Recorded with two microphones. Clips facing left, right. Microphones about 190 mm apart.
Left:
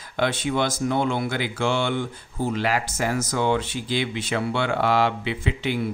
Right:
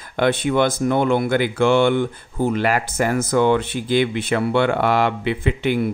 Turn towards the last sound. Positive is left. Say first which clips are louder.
# right 6 dB
turn(degrees=-55)  # may be behind; listen again after turning